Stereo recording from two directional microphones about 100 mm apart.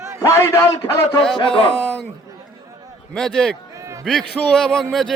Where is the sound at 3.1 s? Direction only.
5° left (ahead or behind).